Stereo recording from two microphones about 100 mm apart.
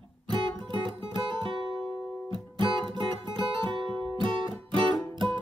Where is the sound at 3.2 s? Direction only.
55° right (ahead or behind).